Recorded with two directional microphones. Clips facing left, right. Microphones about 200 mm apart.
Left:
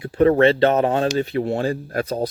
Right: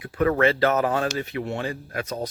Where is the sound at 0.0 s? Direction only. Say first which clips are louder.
Left 6 dB; 30° left (ahead or behind).